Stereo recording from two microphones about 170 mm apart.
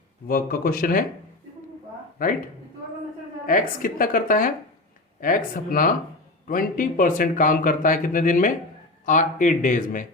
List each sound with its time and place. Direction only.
0.3 s a woman's voice: 60° left (ahead or behind)
2.2 s a woman's voice: 55° left (ahead or behind)
3.4 s a woman's voice: 55° left (ahead or behind)